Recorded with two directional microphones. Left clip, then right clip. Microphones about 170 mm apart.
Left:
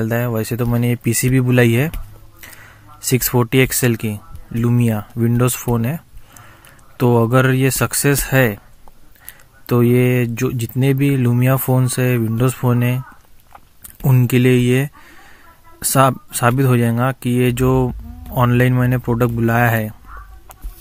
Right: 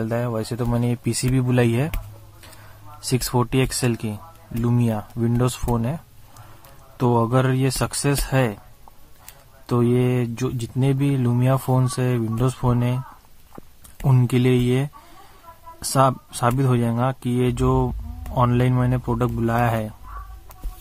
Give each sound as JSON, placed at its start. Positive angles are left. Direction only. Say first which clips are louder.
{"t": 0.0, "sound": "speech", "louder": "left 4 dB", "side_deg": 20}
{"t": 3.3, "sound": "speech", "louder": "left 6 dB", "side_deg": 20}
{"t": 9.7, "sound": "speech", "louder": "left 6 dB", "side_deg": 20}
{"t": 14.0, "sound": "speech", "louder": "left 5 dB", "side_deg": 20}